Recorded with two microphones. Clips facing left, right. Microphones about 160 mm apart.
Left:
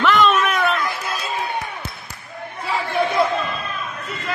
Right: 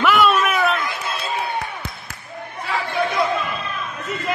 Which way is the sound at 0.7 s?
25° right (ahead or behind).